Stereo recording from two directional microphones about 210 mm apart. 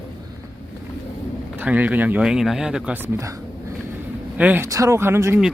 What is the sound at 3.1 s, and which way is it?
Dog, 15° right (ahead or behind).